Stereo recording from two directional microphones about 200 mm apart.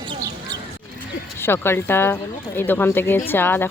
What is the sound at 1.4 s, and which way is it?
Speech, 10° left (ahead or behind).